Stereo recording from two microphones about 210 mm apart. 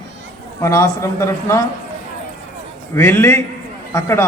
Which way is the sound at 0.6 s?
15° left (ahead or behind).